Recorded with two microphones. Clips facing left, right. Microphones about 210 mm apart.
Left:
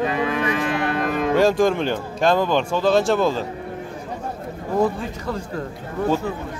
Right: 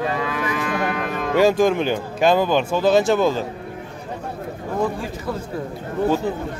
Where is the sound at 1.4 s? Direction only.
Centre (ahead or behind).